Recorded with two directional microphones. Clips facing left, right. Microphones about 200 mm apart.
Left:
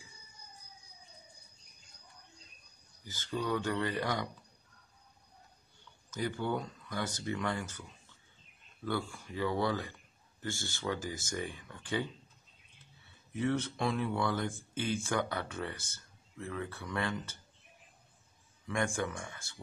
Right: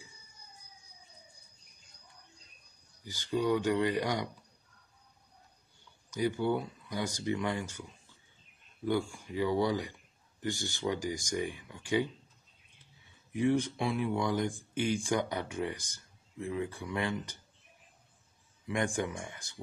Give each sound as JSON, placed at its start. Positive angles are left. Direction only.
{"t": 3.1, "sound": "speech", "side_deg": -15}
{"t": 6.0, "sound": "speech", "side_deg": -15}
{"t": 8.8, "sound": "speech", "side_deg": -15}
{"t": 13.3, "sound": "speech", "side_deg": -15}
{"t": 18.7, "sound": "speech", "side_deg": -20}